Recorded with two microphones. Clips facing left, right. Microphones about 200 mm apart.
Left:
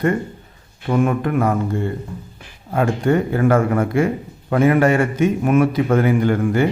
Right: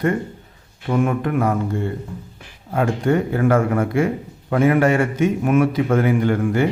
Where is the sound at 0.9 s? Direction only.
45° left (ahead or behind).